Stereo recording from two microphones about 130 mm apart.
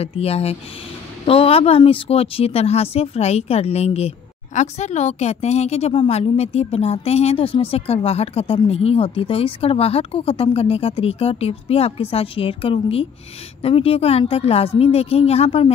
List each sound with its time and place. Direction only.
0.0 s a woman's voice: 50° left (ahead or behind)